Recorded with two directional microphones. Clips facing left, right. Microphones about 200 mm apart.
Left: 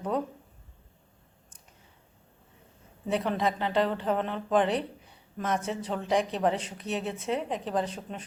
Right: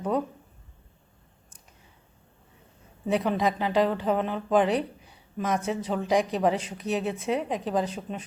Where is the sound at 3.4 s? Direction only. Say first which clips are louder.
Right 3 dB; 5° right (ahead or behind).